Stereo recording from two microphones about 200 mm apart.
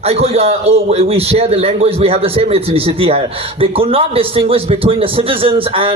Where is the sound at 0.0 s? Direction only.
30° right (ahead or behind).